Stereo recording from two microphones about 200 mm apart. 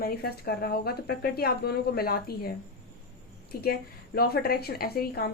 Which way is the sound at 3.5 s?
50° left (ahead or behind).